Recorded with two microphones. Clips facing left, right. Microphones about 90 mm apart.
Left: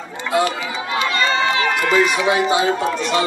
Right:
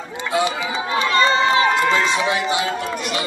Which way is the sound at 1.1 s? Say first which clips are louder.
Right 4 dB; 30° right (ahead or behind).